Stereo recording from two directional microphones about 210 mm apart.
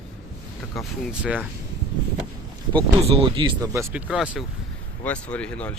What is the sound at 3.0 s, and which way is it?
Speech, 25° right (ahead or behind).